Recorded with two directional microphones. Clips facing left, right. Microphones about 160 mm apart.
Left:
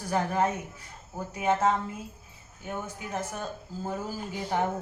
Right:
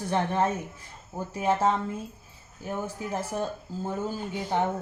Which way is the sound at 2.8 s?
30° right (ahead or behind).